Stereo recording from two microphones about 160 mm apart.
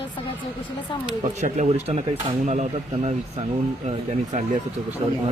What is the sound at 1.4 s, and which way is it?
A man's voice, 45° right (ahead or behind).